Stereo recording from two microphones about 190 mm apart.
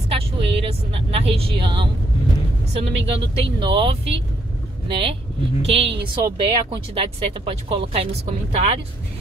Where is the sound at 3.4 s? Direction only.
25° right (ahead or behind).